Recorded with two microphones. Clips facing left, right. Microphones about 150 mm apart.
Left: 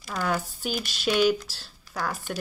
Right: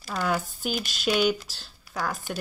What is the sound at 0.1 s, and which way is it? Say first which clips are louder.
Speech: right 1 dB; centre (ahead or behind).